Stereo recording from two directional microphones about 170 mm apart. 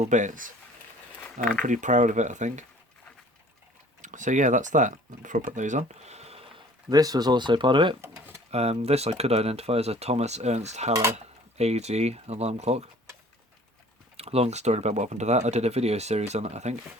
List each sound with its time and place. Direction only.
0.0 s speech: 45° right (ahead or behind)
1.6 s speech: 45° right (ahead or behind)
4.0 s speech: 45° right (ahead or behind)
6.9 s speech: 20° right (ahead or behind)
8.0 s a sound: 15° right (ahead or behind)
8.4 s speech: 40° right (ahead or behind)
14.2 s speech: 35° right (ahead or behind)